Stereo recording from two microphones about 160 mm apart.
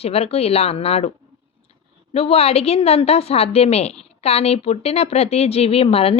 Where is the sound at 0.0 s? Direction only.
40° left (ahead or behind).